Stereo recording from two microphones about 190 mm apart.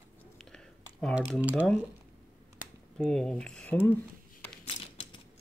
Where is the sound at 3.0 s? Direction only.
5° left (ahead or behind).